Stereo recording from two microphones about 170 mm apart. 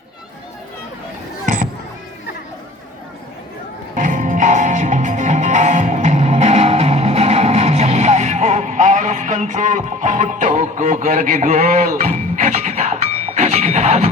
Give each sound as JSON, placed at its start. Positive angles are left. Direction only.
{"t": 3.9, "sound": "music", "side_deg": -50}